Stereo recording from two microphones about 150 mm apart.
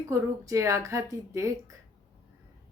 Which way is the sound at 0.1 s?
20° right (ahead or behind).